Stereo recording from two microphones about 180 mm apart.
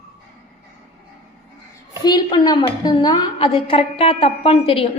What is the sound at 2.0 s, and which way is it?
A woman's voice, 20° left (ahead or behind).